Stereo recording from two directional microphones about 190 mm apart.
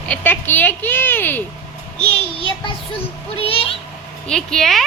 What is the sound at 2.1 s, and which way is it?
Child singing, 30° left (ahead or behind).